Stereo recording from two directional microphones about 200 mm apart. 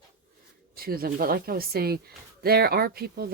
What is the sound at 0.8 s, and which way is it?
Speech, 50° right (ahead or behind).